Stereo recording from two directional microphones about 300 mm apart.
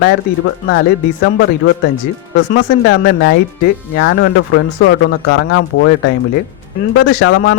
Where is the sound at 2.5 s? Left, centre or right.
Left.